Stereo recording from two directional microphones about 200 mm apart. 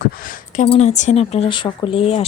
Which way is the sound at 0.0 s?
45° left (ahead or behind).